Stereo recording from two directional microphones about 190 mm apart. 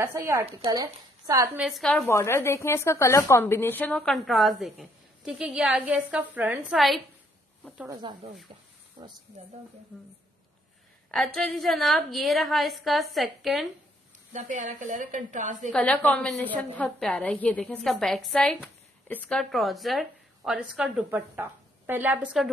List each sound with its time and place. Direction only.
0.0 s a woman's voice: 15° right (ahead or behind)
1.6 s a woman's voice: centre (ahead or behind)
7.9 s speech: 25° right (ahead or behind)
11.1 s a woman's voice: 5° left (ahead or behind)
14.3 s a woman's voice: 40° right (ahead or behind)
15.7 s a woman's voice: 5° left (ahead or behind)